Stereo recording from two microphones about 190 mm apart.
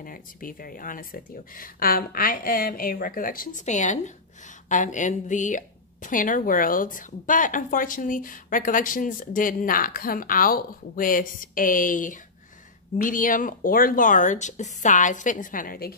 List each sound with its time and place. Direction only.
0.0 s a woman's voice: 45° left (ahead or behind)